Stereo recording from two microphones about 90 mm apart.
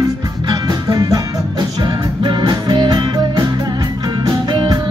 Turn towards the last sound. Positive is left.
turn(degrees=-55)  # may be behind; listen again after turning